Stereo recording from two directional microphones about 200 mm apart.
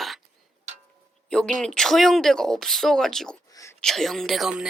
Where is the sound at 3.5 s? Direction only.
15° left (ahead or behind).